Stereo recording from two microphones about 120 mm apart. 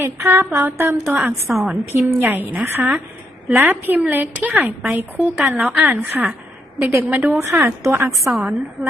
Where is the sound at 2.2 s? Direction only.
15° right (ahead or behind).